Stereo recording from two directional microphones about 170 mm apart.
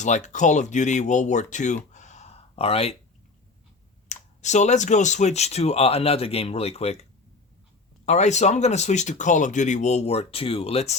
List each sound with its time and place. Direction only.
0.0 s speech: 45° left (ahead or behind)
4.1 s speech: 45° left (ahead or behind)
8.0 s speech: 40° left (ahead or behind)